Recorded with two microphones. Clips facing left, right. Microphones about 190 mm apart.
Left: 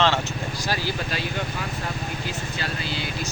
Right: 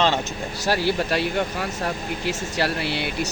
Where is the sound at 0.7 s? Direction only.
65° right (ahead or behind).